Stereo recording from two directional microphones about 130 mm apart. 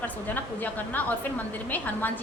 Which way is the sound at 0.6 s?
15° left (ahead or behind).